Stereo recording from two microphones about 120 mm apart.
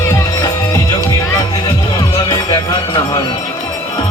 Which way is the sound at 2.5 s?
35° left (ahead or behind).